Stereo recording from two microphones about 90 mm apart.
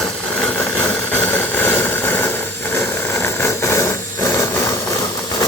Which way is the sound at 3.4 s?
30° left (ahead or behind).